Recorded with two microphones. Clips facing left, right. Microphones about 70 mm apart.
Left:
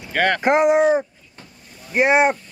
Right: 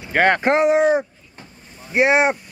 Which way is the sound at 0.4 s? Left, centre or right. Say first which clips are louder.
Even; centre.